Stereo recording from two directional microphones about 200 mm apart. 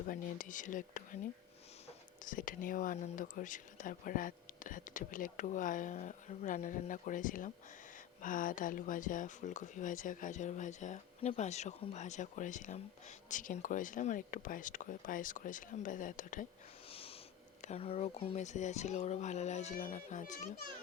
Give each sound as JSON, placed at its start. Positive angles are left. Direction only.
{"t": 0.1, "sound": "speech", "side_deg": 40}
{"t": 2.2, "sound": "speech", "side_deg": 45}
{"t": 16.9, "sound": "snort", "side_deg": 30}
{"t": 17.6, "sound": "speech", "side_deg": 30}